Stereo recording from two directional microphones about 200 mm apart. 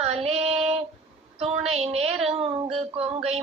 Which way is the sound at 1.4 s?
30° right (ahead or behind).